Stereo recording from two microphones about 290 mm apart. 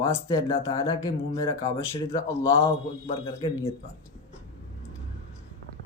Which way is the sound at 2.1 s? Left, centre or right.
Centre.